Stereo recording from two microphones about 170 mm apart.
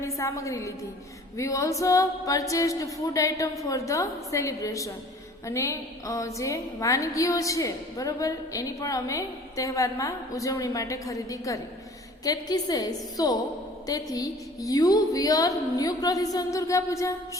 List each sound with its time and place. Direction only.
0.2 s a woman's voice: 20° left (ahead or behind)